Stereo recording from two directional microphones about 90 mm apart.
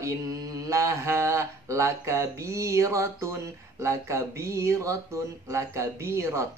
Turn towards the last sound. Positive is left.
turn(degrees=-30)  # may be behind; listen again after turning